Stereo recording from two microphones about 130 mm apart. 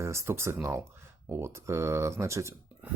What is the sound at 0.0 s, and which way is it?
Speech, 20° right (ahead or behind).